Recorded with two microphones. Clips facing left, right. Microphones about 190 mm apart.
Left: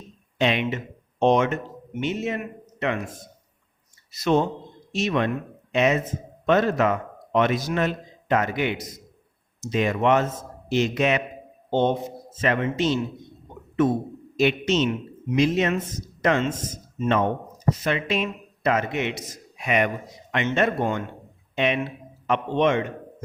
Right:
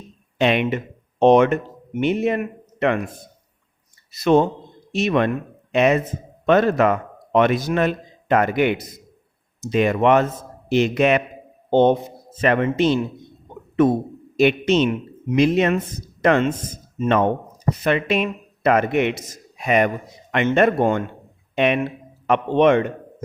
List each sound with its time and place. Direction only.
0.3 s speech: 55° right (ahead or behind)
4.1 s speech: 55° right (ahead or behind)
14.3 s speech: 60° right (ahead or behind)
19.5 s speech: 40° right (ahead or behind)
20.3 s speech: 55° right (ahead or behind)